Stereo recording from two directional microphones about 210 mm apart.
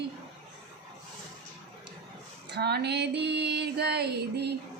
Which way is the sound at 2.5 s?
50° right (ahead or behind).